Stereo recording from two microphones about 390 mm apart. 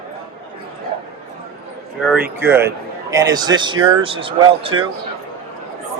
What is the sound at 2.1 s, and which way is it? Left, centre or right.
Speech, centre.